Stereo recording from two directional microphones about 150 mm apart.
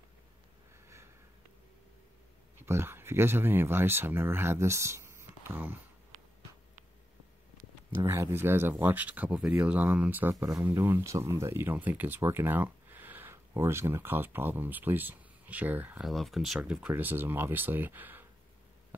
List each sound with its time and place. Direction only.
2.6 s speech: 15° right (ahead or behind)
7.9 s speech: 15° right (ahead or behind)
16.1 s speech: centre (ahead or behind)